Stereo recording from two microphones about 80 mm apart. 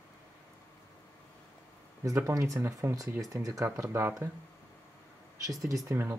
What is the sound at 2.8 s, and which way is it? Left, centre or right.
Speech, right.